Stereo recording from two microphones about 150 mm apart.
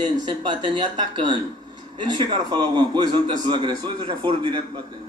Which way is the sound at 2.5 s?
30° right (ahead or behind).